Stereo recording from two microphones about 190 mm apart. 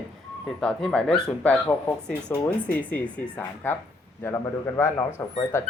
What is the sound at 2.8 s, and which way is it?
Speech, 10° left (ahead or behind).